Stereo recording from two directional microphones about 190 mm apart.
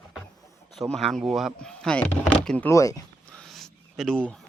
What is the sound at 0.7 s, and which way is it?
Speech, centre (ahead or behind).